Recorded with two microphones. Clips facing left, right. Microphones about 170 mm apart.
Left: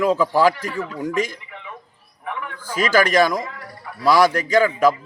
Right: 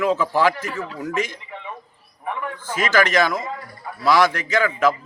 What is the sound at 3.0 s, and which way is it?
Speech, 40° left (ahead or behind).